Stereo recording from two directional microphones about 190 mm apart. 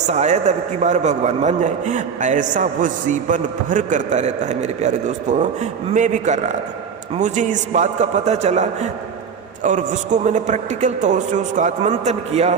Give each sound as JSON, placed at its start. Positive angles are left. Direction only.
{"t": 0.1, "sound": "a man's voice", "side_deg": -35}